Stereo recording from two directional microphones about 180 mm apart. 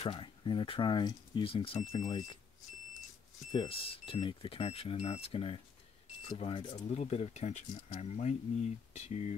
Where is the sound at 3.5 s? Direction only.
30° left (ahead or behind).